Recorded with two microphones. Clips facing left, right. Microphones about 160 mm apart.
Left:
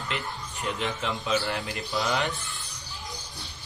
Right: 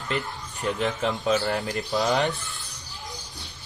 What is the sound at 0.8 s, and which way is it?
Speech, 40° right (ahead or behind).